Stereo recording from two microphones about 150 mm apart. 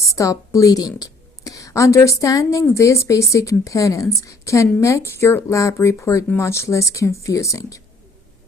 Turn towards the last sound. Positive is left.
turn(degrees=20)  # may be behind; listen again after turning